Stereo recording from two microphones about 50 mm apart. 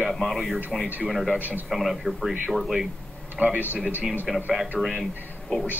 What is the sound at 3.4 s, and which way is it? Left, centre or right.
Speech, right.